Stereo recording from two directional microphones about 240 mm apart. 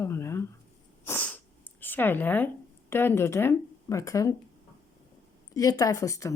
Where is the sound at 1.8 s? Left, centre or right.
Centre.